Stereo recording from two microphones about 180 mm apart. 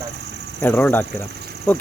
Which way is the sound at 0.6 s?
10° left (ahead or behind).